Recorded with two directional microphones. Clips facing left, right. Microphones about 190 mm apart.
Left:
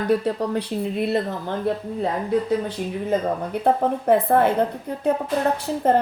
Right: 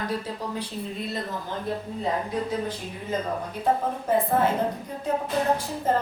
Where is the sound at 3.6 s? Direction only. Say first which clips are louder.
Left 5 dB; 60° left (ahead or behind).